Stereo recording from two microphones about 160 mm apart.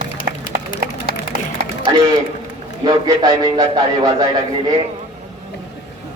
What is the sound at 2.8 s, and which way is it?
A man's voice, 25° right (ahead or behind).